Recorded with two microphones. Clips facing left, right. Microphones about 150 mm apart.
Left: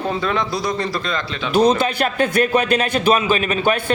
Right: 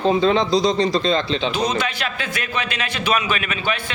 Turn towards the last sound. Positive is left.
turn(degrees=50)  # may be behind; listen again after turning